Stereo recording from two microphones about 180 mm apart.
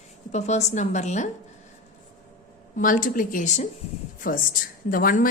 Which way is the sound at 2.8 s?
50° left (ahead or behind).